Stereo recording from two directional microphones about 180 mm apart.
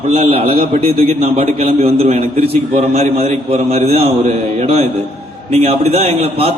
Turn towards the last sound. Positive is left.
turn(degrees=-35)  # may be behind; listen again after turning